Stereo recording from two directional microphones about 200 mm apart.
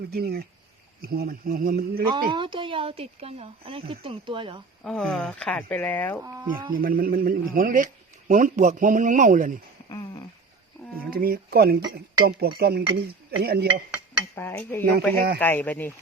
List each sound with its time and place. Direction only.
0.1 s speech: 50° right (ahead or behind)
2.3 s speech: 25° right (ahead or behind)
4.8 s speech: 5° left (ahead or behind)
6.2 s speech: 20° right (ahead or behind)
6.7 s speech: 45° right (ahead or behind)
9.9 s a sound: 15° left (ahead or behind)
11.1 s speech: 45° right (ahead or behind)
14.3 s speech: 10° left (ahead or behind)